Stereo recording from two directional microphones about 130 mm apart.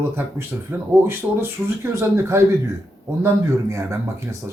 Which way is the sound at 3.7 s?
20° right (ahead or behind).